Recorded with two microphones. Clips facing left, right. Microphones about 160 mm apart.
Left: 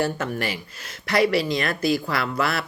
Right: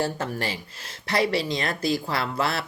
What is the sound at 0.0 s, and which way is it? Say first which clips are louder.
Speech: left 2 dB; 30° right (ahead or behind).